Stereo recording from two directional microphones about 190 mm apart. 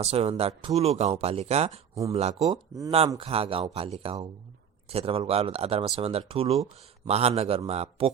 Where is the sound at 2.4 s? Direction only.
20° right (ahead or behind).